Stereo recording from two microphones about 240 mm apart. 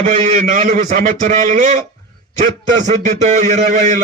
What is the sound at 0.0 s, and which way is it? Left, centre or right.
A man's voice, right.